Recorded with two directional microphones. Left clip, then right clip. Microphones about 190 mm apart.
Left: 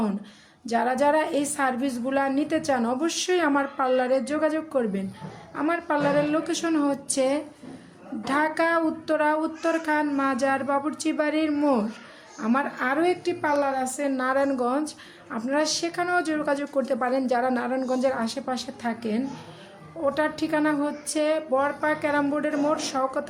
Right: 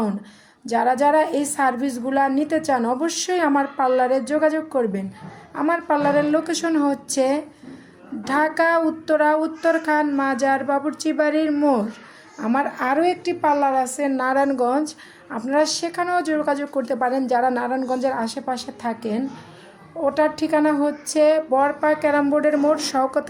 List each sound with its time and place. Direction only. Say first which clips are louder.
0.6 s a woman's voice: right 5 dB; 10° right (ahead or behind)